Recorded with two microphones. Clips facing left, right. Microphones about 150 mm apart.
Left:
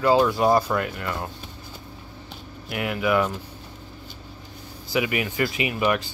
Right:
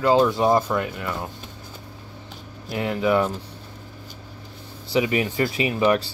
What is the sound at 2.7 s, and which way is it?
Speech, 30° right (ahead or behind).